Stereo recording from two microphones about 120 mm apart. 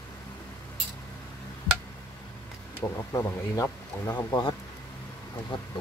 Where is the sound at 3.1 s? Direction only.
25° left (ahead or behind).